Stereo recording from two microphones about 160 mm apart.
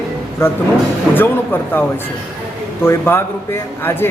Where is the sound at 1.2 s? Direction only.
10° left (ahead or behind).